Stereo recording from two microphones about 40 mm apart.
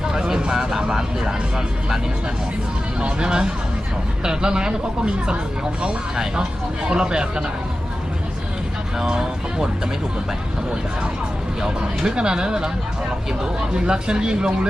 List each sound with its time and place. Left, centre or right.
0.1 s speech: centre
3.0 s speech: right
9.0 s speech: centre
11.6 s speech: centre
13.7 s speech: right